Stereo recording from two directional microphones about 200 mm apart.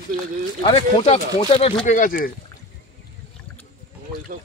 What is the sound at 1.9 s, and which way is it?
Speech, 45° left (ahead or behind).